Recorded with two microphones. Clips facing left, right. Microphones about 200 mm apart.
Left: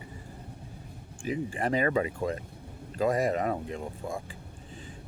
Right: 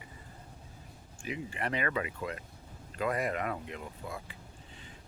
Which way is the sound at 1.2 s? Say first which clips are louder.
Left 7 dB; 35° left (ahead or behind).